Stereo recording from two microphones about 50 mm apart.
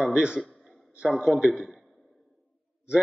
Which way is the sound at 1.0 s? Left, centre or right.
Centre.